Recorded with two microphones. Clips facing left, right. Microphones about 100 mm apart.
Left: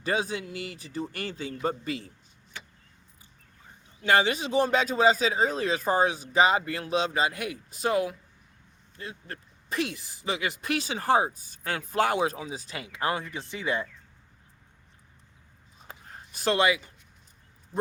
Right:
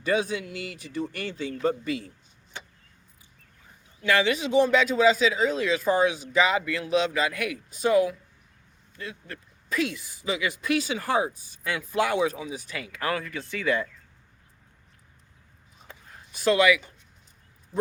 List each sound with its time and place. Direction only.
0.0 s speech: 35° left (ahead or behind)
4.0 s speech: 35° left (ahead or behind)
16.4 s speech: 35° left (ahead or behind)